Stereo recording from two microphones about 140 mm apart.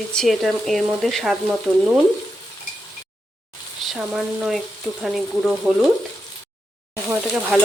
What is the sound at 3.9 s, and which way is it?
Speech, centre (ahead or behind).